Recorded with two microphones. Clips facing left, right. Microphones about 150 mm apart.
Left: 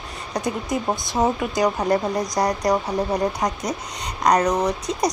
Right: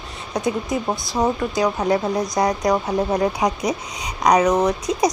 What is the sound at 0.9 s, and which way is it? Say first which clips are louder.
Speech: even; 20° left (ahead or behind).